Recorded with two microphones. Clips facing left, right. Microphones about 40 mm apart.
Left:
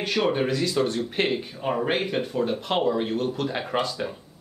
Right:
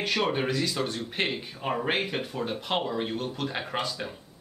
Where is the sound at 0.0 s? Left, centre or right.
Centre.